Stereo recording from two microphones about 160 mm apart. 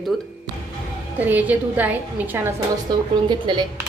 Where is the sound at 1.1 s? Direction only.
10° right (ahead or behind).